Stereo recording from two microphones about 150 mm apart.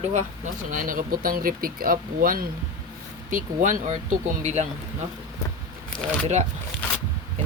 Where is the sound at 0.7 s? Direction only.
60° right (ahead or behind).